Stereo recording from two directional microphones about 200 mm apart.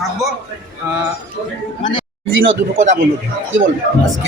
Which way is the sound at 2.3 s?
70° right (ahead or behind).